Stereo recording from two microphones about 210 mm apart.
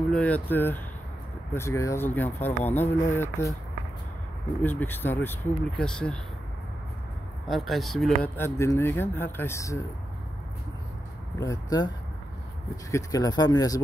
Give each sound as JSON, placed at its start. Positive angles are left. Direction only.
{"t": 0.1, "sound": "speech", "side_deg": 5}
{"t": 4.6, "sound": "speech", "side_deg": 10}
{"t": 7.4, "sound": "speech", "side_deg": 0}
{"t": 11.3, "sound": "speech", "side_deg": 15}
{"t": 12.9, "sound": "speech", "side_deg": 15}